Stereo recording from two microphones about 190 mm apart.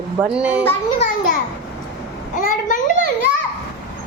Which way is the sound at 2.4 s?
45° left (ahead or behind).